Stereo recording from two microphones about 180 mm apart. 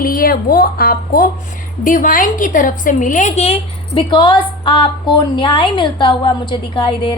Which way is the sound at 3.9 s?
25° left (ahead or behind).